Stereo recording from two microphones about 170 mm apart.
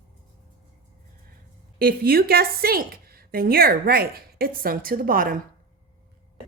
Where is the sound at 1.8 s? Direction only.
60° right (ahead or behind).